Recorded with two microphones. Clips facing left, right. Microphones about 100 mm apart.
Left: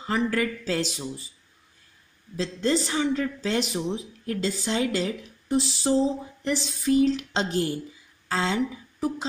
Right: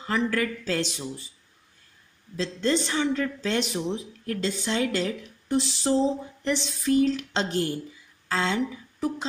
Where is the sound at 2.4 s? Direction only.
10° left (ahead or behind).